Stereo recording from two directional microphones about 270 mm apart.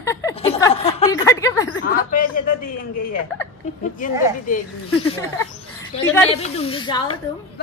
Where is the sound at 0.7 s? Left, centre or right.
Left.